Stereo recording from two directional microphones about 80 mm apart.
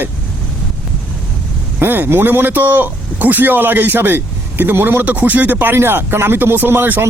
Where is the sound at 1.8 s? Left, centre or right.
Right.